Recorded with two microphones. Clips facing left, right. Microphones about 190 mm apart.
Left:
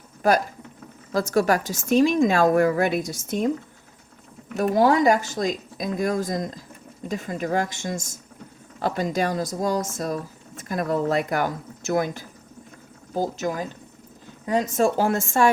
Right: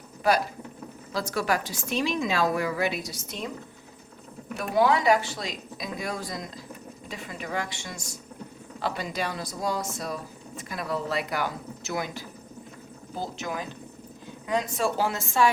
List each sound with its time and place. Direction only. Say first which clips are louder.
0.2 s a woman's voice: left 4 dB; 45° left (ahead or behind)
4.5 s a woman's voice: left 4 dB; 40° left (ahead or behind)